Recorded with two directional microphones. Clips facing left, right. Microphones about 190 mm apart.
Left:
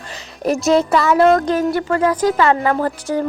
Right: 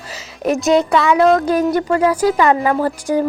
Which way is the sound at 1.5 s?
15° right (ahead or behind).